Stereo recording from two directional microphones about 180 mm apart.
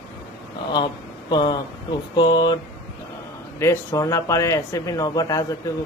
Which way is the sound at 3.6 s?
15° left (ahead or behind).